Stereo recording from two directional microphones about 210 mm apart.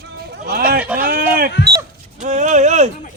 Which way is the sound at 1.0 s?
45° right (ahead or behind).